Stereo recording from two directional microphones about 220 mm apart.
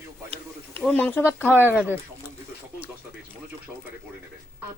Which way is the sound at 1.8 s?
10° right (ahead or behind).